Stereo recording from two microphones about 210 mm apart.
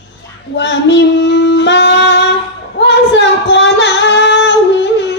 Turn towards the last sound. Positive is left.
turn(degrees=55)  # may be behind; listen again after turning